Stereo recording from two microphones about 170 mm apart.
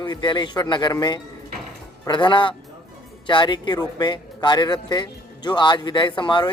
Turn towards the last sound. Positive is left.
turn(degrees=30)  # may be behind; listen again after turning